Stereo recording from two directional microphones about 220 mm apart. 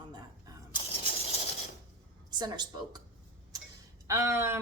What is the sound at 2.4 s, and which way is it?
Speech, 20° right (ahead or behind).